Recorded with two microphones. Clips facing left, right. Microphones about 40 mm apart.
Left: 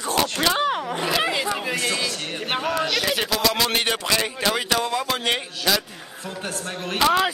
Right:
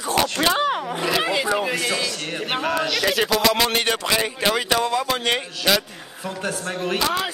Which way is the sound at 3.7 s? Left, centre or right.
Centre.